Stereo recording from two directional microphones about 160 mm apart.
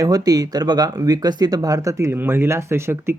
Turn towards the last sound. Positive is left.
turn(degrees=-15)  # may be behind; listen again after turning